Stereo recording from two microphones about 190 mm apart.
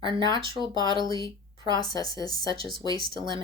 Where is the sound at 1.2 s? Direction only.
25° right (ahead or behind).